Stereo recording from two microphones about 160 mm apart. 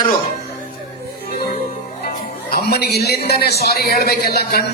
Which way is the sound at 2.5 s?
75° left (ahead or behind).